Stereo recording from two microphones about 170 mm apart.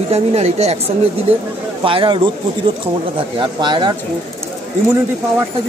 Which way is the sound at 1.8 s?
30° right (ahead or behind).